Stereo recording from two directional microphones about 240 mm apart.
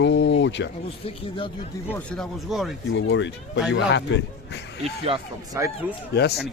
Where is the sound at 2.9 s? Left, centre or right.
Left.